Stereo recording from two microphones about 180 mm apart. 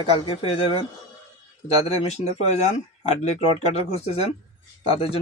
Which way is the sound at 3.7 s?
35° left (ahead or behind).